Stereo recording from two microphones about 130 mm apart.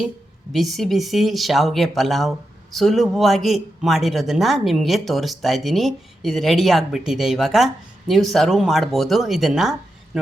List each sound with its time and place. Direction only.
0.5 s speech: centre (ahead or behind)